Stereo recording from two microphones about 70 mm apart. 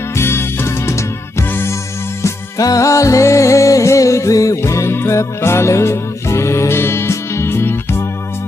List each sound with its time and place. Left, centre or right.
0.1 s music: left
1.5 s music: left
2.2 s music: left